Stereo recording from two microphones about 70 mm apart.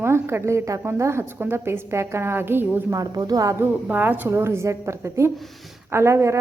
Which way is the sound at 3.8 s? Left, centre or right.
Right.